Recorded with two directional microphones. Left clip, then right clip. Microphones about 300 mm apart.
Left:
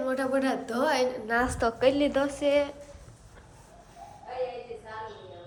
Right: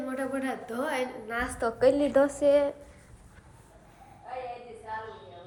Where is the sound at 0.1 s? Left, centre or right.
Centre.